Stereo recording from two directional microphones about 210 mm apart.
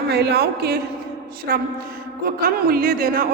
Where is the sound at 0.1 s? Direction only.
50° right (ahead or behind).